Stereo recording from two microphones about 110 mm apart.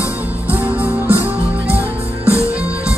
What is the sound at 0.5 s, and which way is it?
Music, 15° right (ahead or behind).